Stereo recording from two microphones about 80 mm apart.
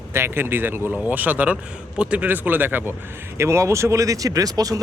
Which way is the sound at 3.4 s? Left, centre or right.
Right.